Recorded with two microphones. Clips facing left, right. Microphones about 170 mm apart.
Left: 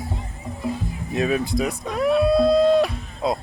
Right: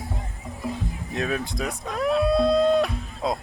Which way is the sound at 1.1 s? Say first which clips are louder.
Left 6 dB; 5° left (ahead or behind).